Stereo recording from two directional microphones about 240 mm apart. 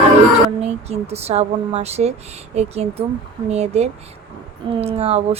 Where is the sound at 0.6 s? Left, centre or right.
Right.